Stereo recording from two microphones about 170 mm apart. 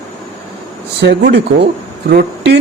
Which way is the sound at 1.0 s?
85° right.